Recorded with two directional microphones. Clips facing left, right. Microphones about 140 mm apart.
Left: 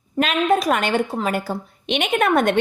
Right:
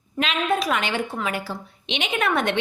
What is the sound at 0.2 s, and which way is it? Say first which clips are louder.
A woman's voice: left 5 dB; 45° left (ahead or behind).